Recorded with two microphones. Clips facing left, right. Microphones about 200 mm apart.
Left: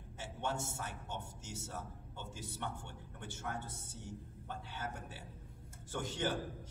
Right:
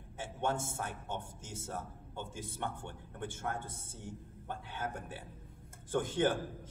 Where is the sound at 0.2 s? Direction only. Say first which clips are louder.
Right 5 dB; 50° right (ahead or behind).